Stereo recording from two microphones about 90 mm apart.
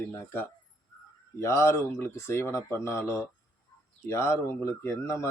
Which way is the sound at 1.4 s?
30° left (ahead or behind).